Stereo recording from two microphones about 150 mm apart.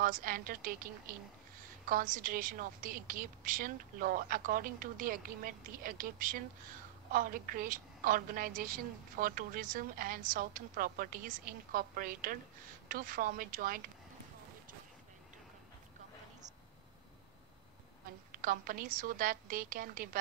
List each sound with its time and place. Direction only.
0.0 s a woman's voice: 65° right (ahead or behind)
1.9 s a woman's voice: 65° right (ahead or behind)
18.3 s a woman's voice: 70° right (ahead or behind)